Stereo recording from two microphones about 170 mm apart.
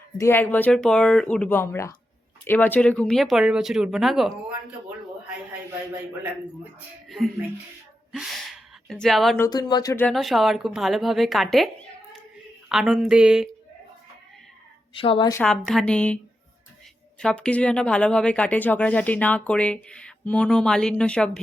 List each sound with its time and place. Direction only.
0.2 s speech: 10° left (ahead or behind)
6.7 s speech: centre (ahead or behind)
9.4 s speech: 25° left (ahead or behind)
10.1 s speech: centre (ahead or behind)
14.9 s a woman's voice: 30° left (ahead or behind)
15.4 s speech: centre (ahead or behind)
17.2 s speech: 5° left (ahead or behind)